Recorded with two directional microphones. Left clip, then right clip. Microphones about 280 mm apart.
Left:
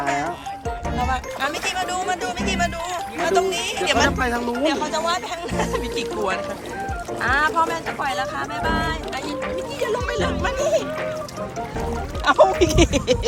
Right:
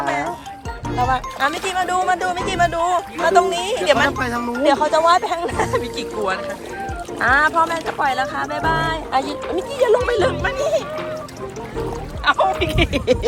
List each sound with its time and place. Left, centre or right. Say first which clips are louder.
0.9 s speech: right 6 dB; centre
10.6 s speech: even; centre
12.2 s speech: left 1 dB; centre